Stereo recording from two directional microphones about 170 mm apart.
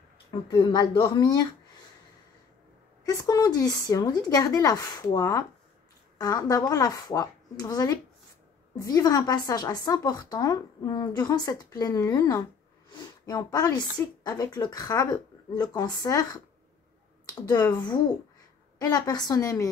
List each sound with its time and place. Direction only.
0.5 s a woman's voice: 25° left (ahead or behind)
3.1 s a woman's voice: 20° left (ahead or behind)
17.4 s a woman's voice: 25° left (ahead or behind)